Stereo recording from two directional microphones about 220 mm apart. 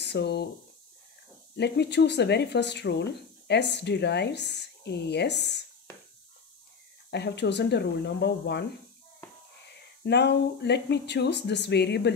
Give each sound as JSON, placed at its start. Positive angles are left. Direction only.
{"t": 0.0, "sound": "speech", "side_deg": 50}
{"t": 1.6, "sound": "speech", "side_deg": 50}
{"t": 7.1, "sound": "speech", "side_deg": 50}
{"t": 10.0, "sound": "speech", "side_deg": 50}